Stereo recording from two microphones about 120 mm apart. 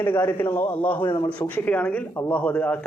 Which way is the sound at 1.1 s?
35° left (ahead or behind).